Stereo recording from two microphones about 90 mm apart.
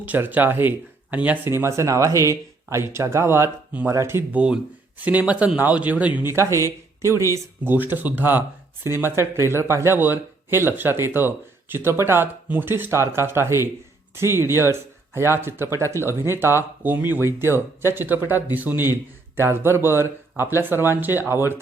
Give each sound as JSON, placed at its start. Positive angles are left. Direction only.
{"t": 0.0, "sound": "speech", "side_deg": -20}
{"t": 1.5, "sound": "speech", "side_deg": -30}
{"t": 4.3, "sound": "speech", "side_deg": -10}
{"t": 6.1, "sound": "speech", "side_deg": -30}
{"t": 7.6, "sound": "speech", "side_deg": -20}